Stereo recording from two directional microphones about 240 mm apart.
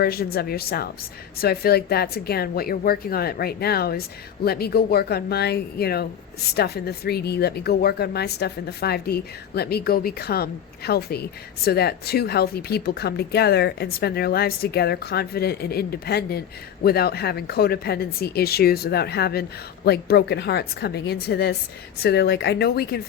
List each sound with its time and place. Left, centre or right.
0.0 s speech: left